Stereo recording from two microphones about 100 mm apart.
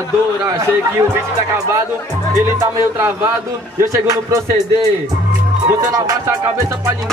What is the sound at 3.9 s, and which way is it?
Speech, 35° right (ahead or behind).